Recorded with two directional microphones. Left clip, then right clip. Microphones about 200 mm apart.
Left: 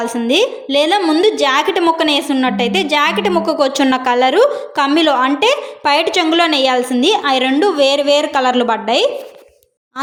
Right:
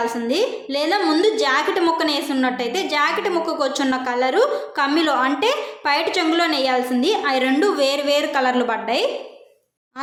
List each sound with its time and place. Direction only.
0.0 s a woman's voice: 35° left (ahead or behind)